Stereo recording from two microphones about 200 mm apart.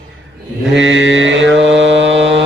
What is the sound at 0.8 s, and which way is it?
Mantra, 65° right (ahead or behind).